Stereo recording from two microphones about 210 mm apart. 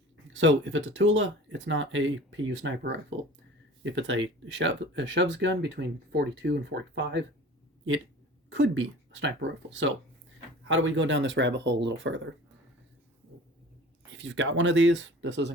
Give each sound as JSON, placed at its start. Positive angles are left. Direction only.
{"t": 0.3, "sound": "speech", "side_deg": -65}
{"t": 8.4, "sound": "speech", "side_deg": -65}
{"t": 14.1, "sound": "speech", "side_deg": -60}